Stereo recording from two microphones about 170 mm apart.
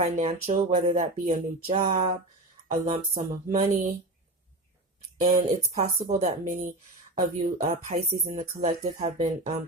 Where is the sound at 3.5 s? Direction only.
45° right (ahead or behind).